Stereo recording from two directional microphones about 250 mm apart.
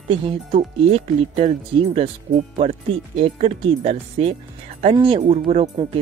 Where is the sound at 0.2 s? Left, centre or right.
Right.